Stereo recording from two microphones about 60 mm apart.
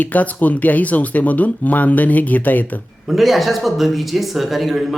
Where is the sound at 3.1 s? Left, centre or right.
Centre.